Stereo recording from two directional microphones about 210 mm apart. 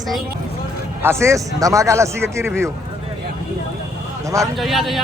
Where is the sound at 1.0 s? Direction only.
10° right (ahead or behind).